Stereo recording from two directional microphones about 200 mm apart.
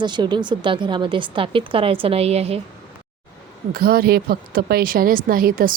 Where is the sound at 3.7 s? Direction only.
50° right (ahead or behind).